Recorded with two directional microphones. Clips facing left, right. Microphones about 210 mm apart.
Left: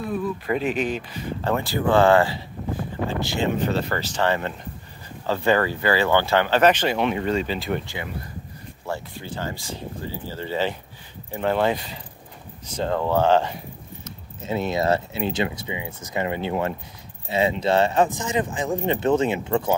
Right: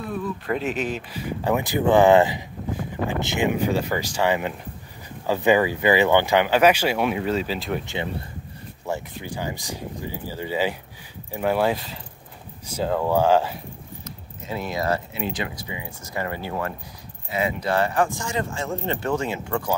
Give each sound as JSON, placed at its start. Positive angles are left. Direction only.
{"t": 0.1, "sound": "speech", "side_deg": 5}
{"t": 1.4, "sound": "speech", "side_deg": -15}
{"t": 7.8, "sound": "speech", "side_deg": -25}
{"t": 14.0, "sound": "speech", "side_deg": 25}